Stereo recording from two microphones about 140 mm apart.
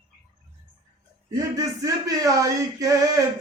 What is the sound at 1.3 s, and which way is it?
A man's voice, 25° right (ahead or behind).